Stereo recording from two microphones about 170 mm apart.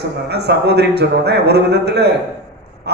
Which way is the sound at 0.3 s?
75° right (ahead or behind).